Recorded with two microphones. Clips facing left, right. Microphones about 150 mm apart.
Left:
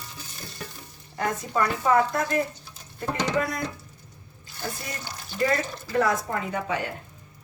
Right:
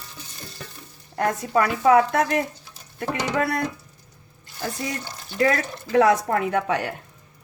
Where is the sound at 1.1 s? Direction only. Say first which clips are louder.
Right 4 dB; 65° right (ahead or behind).